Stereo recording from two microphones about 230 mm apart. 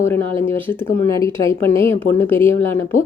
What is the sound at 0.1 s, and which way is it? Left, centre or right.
Speech, centre.